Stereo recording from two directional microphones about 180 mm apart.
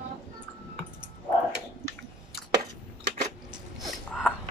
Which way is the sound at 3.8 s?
Centre (ahead or behind).